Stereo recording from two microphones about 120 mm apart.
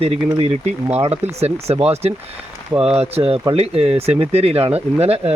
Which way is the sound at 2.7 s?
5° right (ahead or behind).